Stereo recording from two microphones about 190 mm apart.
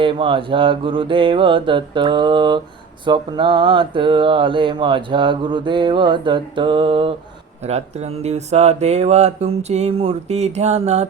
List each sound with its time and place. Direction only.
0.0 s speech: 25° right (ahead or behind)